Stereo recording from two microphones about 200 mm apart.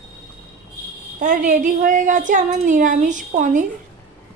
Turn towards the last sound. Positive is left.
turn(degrees=-40)  # may be behind; listen again after turning